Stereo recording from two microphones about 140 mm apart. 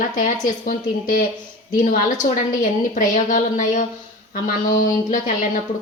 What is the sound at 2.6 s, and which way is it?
A woman's voice, 70° left (ahead or behind).